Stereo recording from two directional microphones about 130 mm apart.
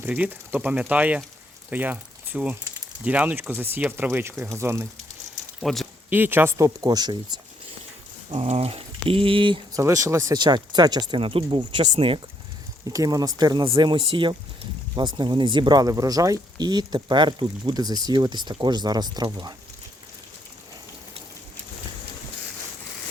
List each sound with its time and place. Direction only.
0.0 s speech: 15° right (ahead or behind)
5.6 s speech: centre (ahead or behind)
6.1 s speech: 15° right (ahead or behind); by 7.3 s 35° right (ahead or behind)
8.3 s speech: 50° right (ahead or behind)
9.7 s speech: 25° right (ahead or behind); by 12.2 s 45° right (ahead or behind)
12.9 s speech: 25° right (ahead or behind)
13.7 s speech: 40° right (ahead or behind)